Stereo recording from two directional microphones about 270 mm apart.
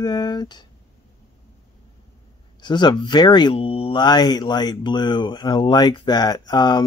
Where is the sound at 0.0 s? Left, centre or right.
Centre.